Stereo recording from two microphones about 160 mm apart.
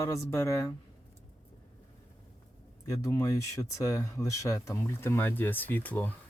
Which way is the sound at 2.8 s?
20° left (ahead or behind).